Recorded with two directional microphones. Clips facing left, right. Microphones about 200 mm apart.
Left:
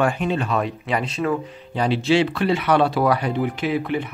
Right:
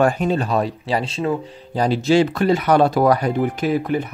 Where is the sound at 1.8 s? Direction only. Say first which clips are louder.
Right 3 dB; 40° right (ahead or behind).